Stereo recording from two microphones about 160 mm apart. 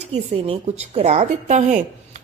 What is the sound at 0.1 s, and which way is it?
A woman's voice, 40° right (ahead or behind).